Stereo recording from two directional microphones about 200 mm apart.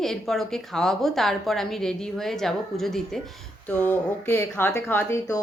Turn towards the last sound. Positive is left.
turn(degrees=15)  # may be behind; listen again after turning